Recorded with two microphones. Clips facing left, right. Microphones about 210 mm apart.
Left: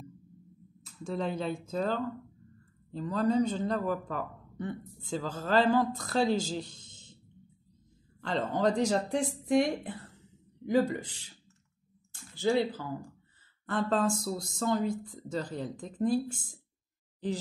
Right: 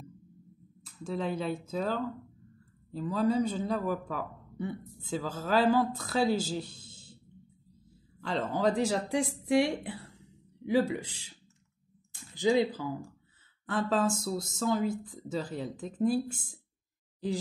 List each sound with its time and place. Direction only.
0.8 s a man's voice: 5° right (ahead or behind)
8.2 s a man's voice: 5° right (ahead or behind)
13.7 s speech: centre (ahead or behind)